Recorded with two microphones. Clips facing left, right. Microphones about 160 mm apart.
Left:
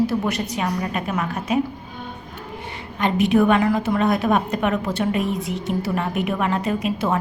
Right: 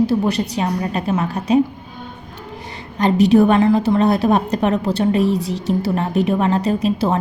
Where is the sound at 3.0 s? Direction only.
35° right (ahead or behind).